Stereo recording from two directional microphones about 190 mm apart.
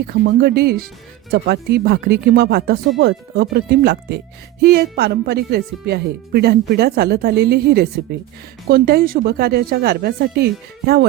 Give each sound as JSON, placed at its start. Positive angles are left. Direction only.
{"t": 0.1, "sound": "speech", "side_deg": -55}